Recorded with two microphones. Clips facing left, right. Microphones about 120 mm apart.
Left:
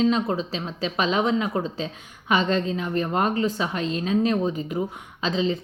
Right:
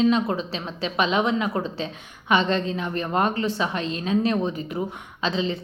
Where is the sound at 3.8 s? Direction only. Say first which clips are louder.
Left 3 dB; 35° left (ahead or behind).